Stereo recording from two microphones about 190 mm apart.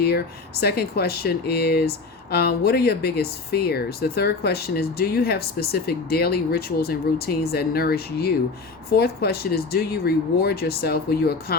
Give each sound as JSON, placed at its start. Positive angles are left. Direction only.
{"t": 0.6, "sound": "speech", "side_deg": 55}